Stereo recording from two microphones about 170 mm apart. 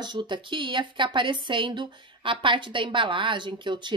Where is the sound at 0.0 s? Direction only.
25° right (ahead or behind).